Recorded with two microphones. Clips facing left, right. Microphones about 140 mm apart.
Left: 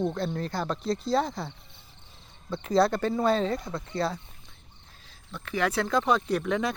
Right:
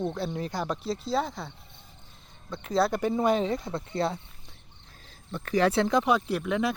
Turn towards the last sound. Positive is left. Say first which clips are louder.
# even
turn(degrees=-5)  # may be behind; listen again after turning